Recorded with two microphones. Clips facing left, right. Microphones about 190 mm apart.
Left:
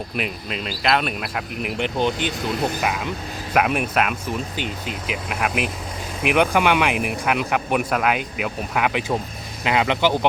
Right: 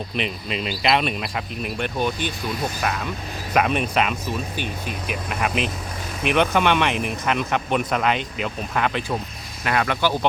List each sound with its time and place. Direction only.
0.2 s speech: centre (ahead or behind)
1.6 s speech: 15° left (ahead or behind)
4.5 s speech: 15° left (ahead or behind)